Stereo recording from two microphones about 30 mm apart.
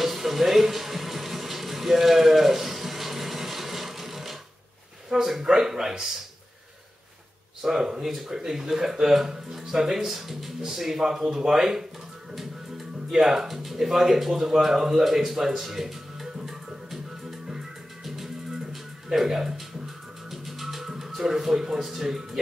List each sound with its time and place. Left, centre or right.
0.0 s music: centre
5.1 s a sound: centre
5.4 s speech: centre
7.6 s speech: centre
13.2 s speech: centre
14.7 s music: centre
19.2 s speech: centre
20.2 s music: centre
21.2 s speech: centre